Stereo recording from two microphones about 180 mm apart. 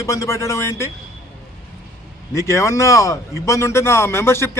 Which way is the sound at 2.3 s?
15° left (ahead or behind).